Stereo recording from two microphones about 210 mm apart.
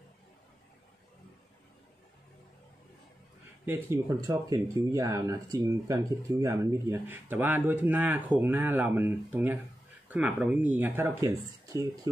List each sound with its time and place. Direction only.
3.6 s speech: 10° right (ahead or behind)